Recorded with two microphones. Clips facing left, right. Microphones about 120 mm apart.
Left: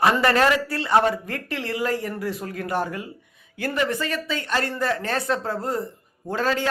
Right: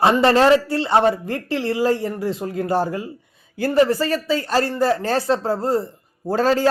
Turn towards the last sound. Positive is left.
turn(degrees=-35)  # may be behind; listen again after turning